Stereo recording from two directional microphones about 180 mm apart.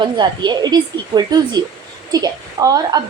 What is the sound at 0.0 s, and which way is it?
A woman's voice, 25° right (ahead or behind).